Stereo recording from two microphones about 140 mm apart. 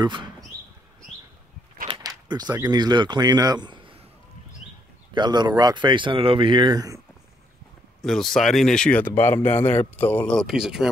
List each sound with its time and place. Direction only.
0.0 s speech: 35° right (ahead or behind)
1.9 s a sound: 30° right (ahead or behind)
2.6 s speech: 30° right (ahead or behind)
5.1 s speech: 30° right (ahead or behind)
8.0 s speech: centre (ahead or behind)